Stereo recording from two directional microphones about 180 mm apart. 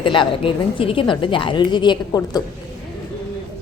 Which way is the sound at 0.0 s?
30° left (ahead or behind).